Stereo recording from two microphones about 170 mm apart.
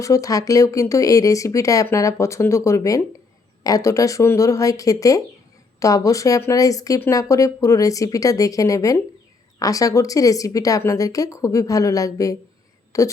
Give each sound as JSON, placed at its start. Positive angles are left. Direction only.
{"t": 0.0, "sound": "speech", "side_deg": 20}